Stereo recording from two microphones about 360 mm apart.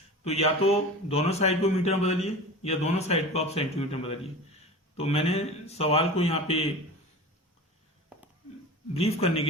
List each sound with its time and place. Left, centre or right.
0.3 s a man's voice: centre
8.9 s a man's voice: centre